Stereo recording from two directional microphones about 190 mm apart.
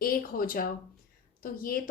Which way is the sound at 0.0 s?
50° left (ahead or behind).